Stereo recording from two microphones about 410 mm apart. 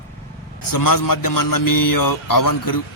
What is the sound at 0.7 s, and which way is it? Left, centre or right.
A man's voice, left.